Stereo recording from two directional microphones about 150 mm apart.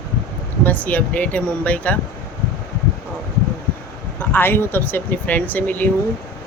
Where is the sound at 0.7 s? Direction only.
10° left (ahead or behind).